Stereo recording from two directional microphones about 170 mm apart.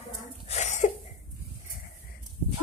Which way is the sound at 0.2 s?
40° left (ahead or behind).